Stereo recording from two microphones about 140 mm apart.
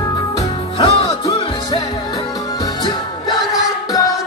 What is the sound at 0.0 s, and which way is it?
Music, 25° left (ahead or behind).